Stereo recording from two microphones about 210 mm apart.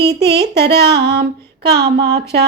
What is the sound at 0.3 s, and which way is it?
Speech, 50° right (ahead or behind).